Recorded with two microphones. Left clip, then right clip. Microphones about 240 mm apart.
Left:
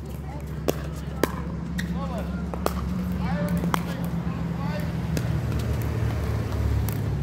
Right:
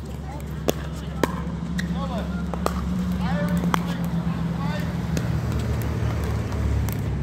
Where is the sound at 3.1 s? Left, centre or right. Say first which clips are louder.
Right 2 dB; right.